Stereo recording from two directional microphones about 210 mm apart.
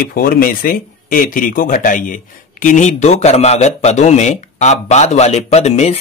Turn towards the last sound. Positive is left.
turn(degrees=30)  # may be behind; listen again after turning